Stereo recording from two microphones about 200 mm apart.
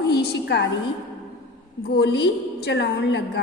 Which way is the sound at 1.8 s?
55° left (ahead or behind).